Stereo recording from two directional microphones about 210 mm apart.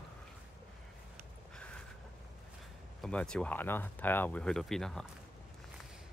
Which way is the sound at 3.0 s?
5° left (ahead or behind).